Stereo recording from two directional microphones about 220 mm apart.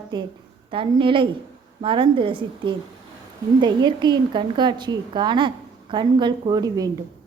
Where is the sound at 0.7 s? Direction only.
25° right (ahead or behind).